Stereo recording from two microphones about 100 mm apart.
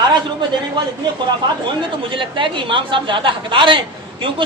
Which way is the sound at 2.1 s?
55° right (ahead or behind).